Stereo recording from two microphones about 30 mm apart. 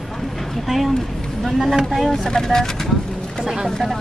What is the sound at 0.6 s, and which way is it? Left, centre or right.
Speech, centre.